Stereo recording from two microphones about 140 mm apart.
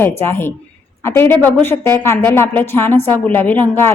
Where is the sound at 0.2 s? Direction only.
15° left (ahead or behind).